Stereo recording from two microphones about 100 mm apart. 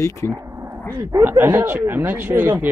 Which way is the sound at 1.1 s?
20° right (ahead or behind).